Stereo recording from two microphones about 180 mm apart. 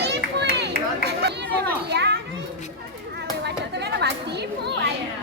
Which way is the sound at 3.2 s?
70° right (ahead or behind).